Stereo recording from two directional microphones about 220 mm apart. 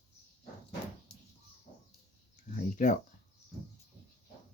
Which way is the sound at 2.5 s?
35° left (ahead or behind).